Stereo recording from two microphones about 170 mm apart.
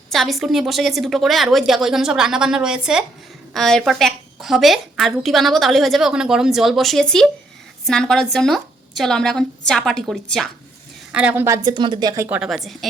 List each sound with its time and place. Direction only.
0.1 s a woman's voice: centre (ahead or behind); by 12.4 s 15° right (ahead or behind)
12.4 s a woman's voice: centre (ahead or behind)